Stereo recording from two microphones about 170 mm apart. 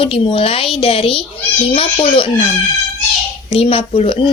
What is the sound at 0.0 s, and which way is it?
Speech, 35° left (ahead or behind).